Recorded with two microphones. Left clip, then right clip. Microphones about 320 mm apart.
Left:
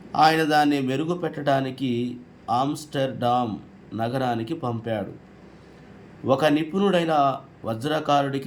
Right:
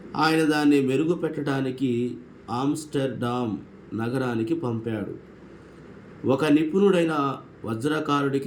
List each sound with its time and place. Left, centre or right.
0.1 s a man's voice: centre
6.2 s a man's voice: centre